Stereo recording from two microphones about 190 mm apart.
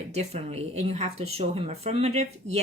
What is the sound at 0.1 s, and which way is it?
Speech, 35° right (ahead or behind).